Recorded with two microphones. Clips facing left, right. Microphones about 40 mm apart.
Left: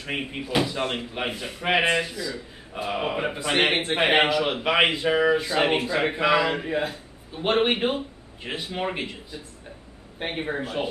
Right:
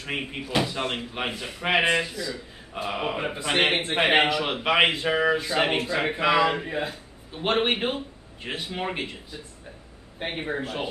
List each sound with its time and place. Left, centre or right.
0.0 s a man's voice: centre
1.5 s speech: centre
1.8 s a man's voice: centre
2.1 s a man's voice: centre
2.7 s a man's voice: centre